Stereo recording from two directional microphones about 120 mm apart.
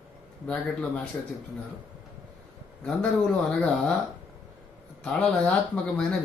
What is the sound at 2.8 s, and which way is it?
Speech, 5° left (ahead or behind).